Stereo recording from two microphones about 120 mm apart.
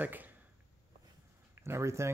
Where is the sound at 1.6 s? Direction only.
20° right (ahead or behind).